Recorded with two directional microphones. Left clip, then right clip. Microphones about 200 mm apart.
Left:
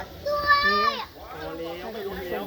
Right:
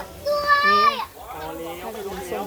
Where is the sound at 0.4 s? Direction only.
15° left (ahead or behind).